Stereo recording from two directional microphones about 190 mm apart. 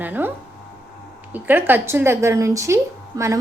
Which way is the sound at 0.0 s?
10° right (ahead or behind).